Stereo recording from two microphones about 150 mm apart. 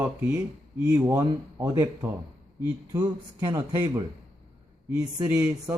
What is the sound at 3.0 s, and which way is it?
Speech, 30° right (ahead or behind).